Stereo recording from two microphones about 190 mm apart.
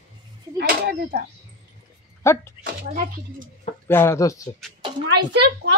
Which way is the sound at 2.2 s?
15° left (ahead or behind).